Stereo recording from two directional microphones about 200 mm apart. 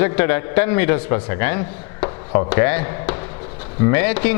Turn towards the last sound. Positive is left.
turn(degrees=10)  # may be behind; listen again after turning